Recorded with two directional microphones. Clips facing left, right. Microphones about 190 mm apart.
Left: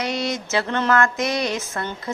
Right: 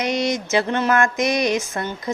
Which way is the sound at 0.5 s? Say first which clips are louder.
Even; 15° right (ahead or behind).